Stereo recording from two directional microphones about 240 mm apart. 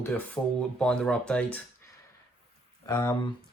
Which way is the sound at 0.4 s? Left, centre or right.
Centre.